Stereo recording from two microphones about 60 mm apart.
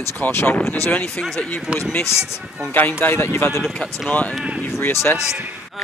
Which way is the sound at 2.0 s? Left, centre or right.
Left.